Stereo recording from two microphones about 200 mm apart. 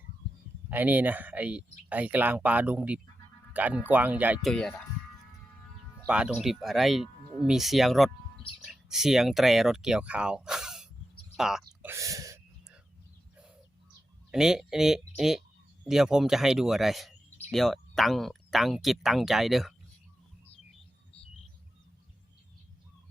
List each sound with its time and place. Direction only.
0.7 s speech: 10° right (ahead or behind)
6.1 s speech: 5° right (ahead or behind)
11.3 s a sound: centre (ahead or behind)
11.9 s gasp: 15° right (ahead or behind)
14.3 s speech: 5° right (ahead or behind)